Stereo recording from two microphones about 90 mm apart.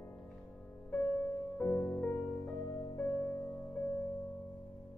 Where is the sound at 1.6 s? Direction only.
20° left (ahead or behind).